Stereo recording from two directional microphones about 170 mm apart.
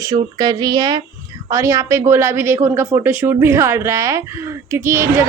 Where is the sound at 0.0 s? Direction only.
20° right (ahead or behind).